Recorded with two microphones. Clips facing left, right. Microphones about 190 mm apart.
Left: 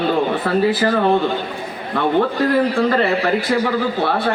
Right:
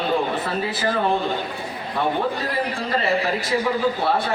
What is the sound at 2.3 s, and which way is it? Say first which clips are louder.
A man's voice: left 9 dB; 65° left (ahead or behind).